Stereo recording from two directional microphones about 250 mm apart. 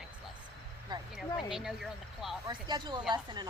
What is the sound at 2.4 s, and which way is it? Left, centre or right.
Speech, centre.